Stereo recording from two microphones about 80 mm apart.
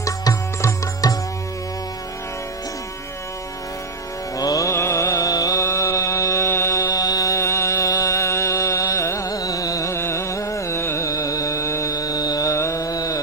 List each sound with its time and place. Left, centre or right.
0.0 s music: left
4.4 s music: left
5.6 s mantra: left
6.8 s music: left
7.3 s music: left
9.9 s music: left